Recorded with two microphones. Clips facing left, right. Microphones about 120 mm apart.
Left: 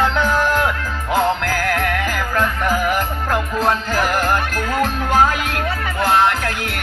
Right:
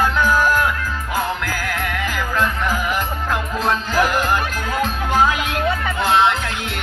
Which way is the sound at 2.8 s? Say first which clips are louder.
Left 2 dB; 50° left (ahead or behind).